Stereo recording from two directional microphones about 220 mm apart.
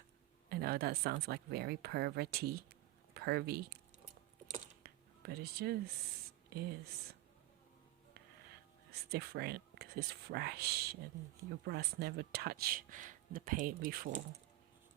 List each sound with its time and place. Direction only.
0.5 s speech: 45° right (ahead or behind)
4.5 s a sound: 40° right (ahead or behind)
6.5 s speech: 45° right (ahead or behind)
8.9 s speech: 45° right (ahead or behind)